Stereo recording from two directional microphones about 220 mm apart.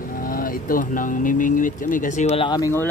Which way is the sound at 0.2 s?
40° left (ahead or behind).